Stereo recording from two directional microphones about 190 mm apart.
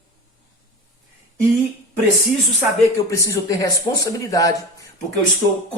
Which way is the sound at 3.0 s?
15° left (ahead or behind).